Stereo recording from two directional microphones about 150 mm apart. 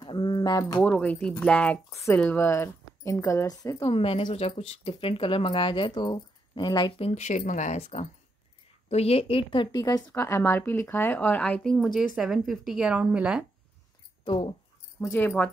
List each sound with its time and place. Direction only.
0.0 s a sound: 30° left (ahead or behind)
0.7 s a woman's voice: 10° left (ahead or behind)
3.8 s speech: 35° left (ahead or behind)
7.1 s a woman's voice: 50° left (ahead or behind); by 13.5 s 5° right (ahead or behind)
14.2 s speech: 35° left (ahead or behind)
15.0 s a woman's voice: 15° left (ahead or behind)